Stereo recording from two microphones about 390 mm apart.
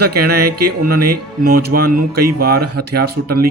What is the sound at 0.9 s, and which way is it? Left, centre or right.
Speech, right.